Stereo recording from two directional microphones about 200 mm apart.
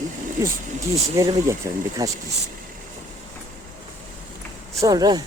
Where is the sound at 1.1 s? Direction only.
15° right (ahead or behind).